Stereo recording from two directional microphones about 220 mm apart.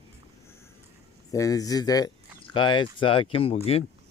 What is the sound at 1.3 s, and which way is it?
Speech, 15° left (ahead or behind).